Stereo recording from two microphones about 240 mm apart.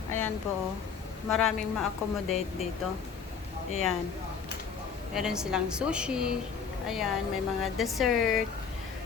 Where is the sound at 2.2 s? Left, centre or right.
Left.